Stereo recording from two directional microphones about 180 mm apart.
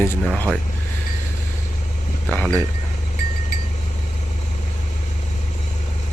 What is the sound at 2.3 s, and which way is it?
Speech, 5° left (ahead or behind).